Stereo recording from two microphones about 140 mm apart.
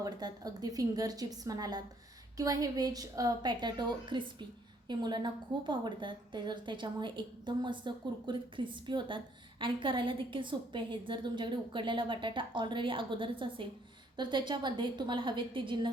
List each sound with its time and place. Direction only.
0.0 s a woman's voice: 25° right (ahead or behind)